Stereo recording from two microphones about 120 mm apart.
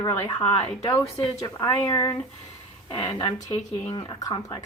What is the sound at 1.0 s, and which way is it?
Speech, 55° left (ahead or behind).